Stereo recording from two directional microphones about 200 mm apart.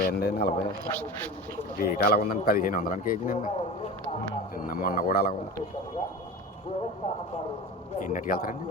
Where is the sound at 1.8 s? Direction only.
50° left (ahead or behind).